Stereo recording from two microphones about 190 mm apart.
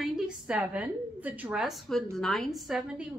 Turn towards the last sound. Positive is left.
turn(degrees=-5)  # may be behind; listen again after turning